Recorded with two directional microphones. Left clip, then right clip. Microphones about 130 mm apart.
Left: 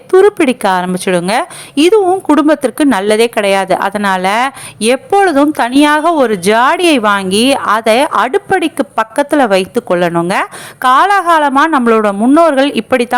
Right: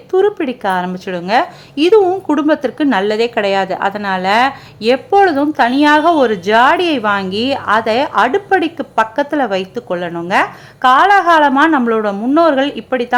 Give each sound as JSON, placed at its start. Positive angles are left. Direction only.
{"t": 0.1, "sound": "a woman's voice", "side_deg": 35}